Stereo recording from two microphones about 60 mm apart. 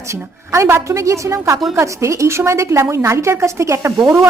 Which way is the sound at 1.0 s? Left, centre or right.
Right.